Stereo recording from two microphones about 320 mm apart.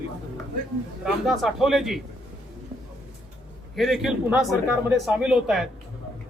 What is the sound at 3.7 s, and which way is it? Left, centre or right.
A man's voice, centre.